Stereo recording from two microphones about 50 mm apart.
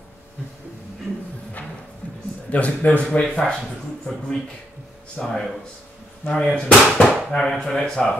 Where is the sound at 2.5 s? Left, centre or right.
Left.